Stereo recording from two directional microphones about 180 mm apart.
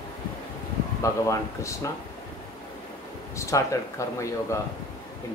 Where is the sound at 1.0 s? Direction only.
15° left (ahead or behind).